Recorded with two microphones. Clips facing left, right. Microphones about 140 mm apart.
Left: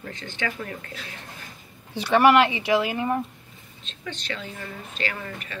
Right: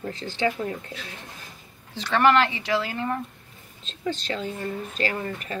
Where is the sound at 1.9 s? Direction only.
10° left (ahead or behind).